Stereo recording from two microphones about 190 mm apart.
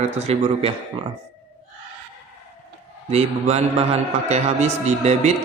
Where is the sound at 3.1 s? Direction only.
35° right (ahead or behind).